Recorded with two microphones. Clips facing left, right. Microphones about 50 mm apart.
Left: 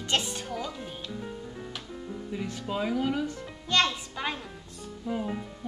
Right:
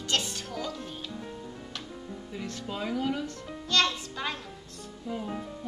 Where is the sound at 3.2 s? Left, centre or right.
Centre.